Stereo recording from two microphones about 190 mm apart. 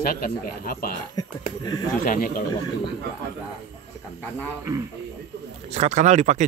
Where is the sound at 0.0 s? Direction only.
50° left (ahead or behind).